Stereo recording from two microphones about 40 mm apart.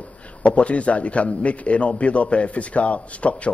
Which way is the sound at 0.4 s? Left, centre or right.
Left.